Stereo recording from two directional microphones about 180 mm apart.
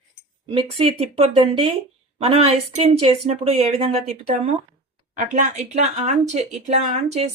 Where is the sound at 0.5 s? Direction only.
30° right (ahead or behind).